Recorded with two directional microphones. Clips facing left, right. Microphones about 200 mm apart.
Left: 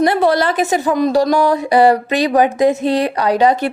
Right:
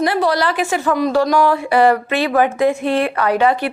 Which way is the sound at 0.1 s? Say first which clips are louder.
Left 3 dB; 25° left (ahead or behind).